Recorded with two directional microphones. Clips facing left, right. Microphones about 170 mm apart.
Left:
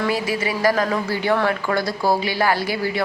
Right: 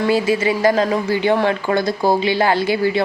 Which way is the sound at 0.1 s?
25° right (ahead or behind).